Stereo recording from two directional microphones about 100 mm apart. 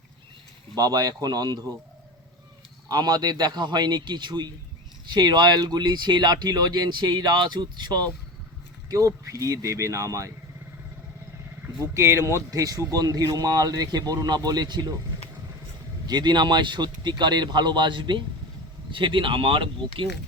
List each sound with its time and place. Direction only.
0.8 s a man's voice: 40° right (ahead or behind)
2.9 s speech: 40° right (ahead or behind)
8.9 s a man's voice: 35° right (ahead or behind)
11.9 s a man's voice: 25° right (ahead or behind)
16.0 s speech: 45° right (ahead or behind)